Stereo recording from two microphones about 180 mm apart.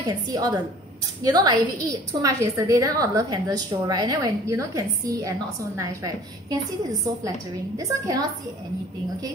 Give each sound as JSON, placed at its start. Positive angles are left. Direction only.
{"t": 0.3, "sound": "a woman's voice", "side_deg": -20}